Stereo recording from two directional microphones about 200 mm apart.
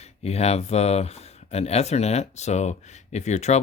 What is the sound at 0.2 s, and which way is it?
Speech, 30° left (ahead or behind).